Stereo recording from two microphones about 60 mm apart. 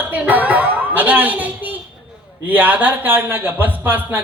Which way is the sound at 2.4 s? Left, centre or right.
Right.